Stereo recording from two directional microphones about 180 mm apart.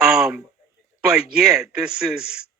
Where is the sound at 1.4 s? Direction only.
5° right (ahead or behind).